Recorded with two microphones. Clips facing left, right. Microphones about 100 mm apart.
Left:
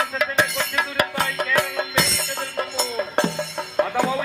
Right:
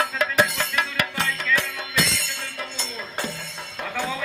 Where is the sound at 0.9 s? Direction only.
40° left (ahead or behind).